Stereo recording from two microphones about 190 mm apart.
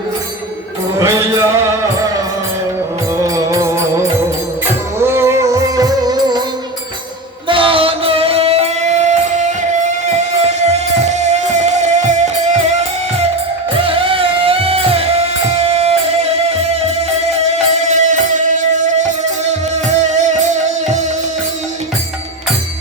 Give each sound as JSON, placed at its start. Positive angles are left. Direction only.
{"t": 0.9, "sound": "music", "side_deg": -15}
{"t": 3.2, "sound": "music", "side_deg": -15}
{"t": 4.9, "sound": "music", "side_deg": -15}
{"t": 7.4, "sound": "music", "side_deg": -25}